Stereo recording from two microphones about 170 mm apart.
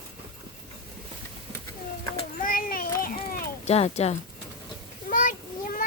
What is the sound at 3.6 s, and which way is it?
Speech, 40° left (ahead or behind).